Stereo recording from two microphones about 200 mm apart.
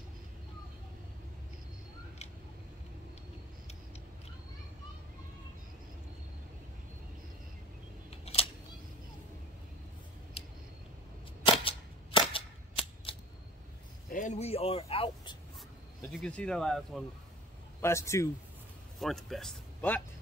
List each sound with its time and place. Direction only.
8.1 s camera: 30° left (ahead or behind)
10.4 s a sound: 30° left (ahead or behind)
11.6 s cap gun: 25° left (ahead or behind)
14.1 s speech: 35° left (ahead or behind)
16.1 s speech: 5° left (ahead or behind)
17.8 s a man's voice: 15° left (ahead or behind)
18.9 s speech: centre (ahead or behind)